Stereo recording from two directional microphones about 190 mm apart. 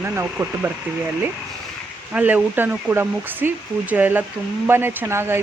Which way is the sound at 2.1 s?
10° right (ahead or behind).